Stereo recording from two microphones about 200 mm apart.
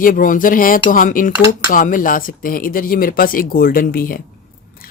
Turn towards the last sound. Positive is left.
turn(degrees=45)  # may be behind; listen again after turning